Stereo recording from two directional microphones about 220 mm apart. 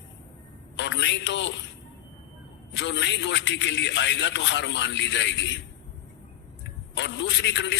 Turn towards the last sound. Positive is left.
turn(degrees=55)  # may be behind; listen again after turning